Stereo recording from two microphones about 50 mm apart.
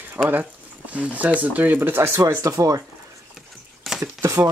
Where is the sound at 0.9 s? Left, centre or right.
Right.